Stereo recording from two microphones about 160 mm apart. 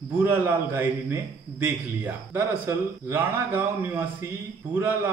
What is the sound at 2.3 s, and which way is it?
A man's voice, 15° right (ahead or behind).